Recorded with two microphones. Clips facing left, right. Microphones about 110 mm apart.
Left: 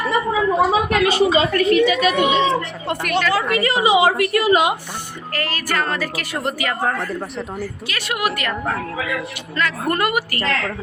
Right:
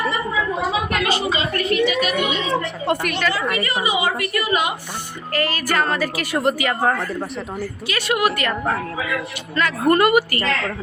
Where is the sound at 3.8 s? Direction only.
90° left.